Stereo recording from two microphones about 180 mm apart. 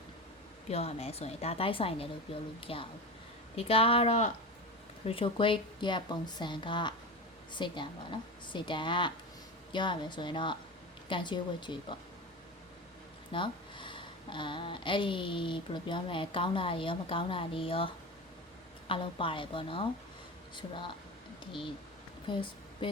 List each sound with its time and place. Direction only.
0.7 s speech: 35° left (ahead or behind)
13.3 s speech: 25° left (ahead or behind)
22.3 s a sound: 25° left (ahead or behind)